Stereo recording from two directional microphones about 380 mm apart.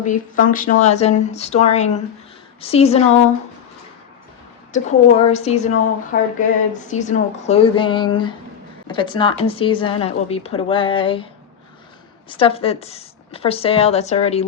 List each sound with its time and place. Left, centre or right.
0.0 s a woman's voice: centre
4.7 s a woman's voice: centre
12.3 s a woman's voice: centre